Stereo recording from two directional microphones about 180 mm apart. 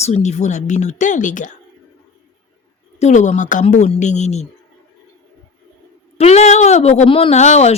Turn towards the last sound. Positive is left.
turn(degrees=40)  # may be behind; listen again after turning